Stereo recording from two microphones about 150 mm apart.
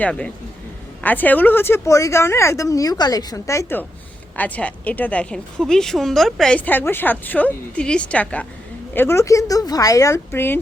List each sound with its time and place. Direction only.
0.0 s a woman's voice: 5° left (ahead or behind)